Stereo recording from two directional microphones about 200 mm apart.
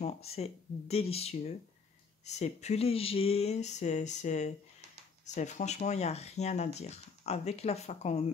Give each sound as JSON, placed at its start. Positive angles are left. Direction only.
{"t": 0.0, "sound": "speech", "side_deg": 30}